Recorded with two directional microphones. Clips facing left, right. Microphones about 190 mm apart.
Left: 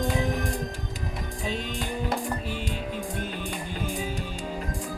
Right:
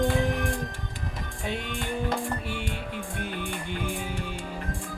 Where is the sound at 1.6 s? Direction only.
40° left (ahead or behind).